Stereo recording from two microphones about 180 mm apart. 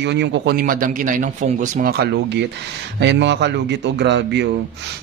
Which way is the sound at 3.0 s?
75° right (ahead or behind).